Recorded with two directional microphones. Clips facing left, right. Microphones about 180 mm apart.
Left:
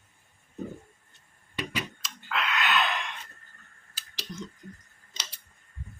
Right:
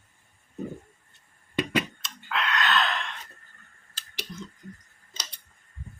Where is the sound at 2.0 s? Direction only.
Centre (ahead or behind).